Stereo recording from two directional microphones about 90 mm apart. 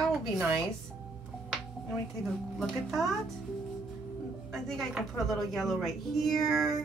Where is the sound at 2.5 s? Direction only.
5° left (ahead or behind).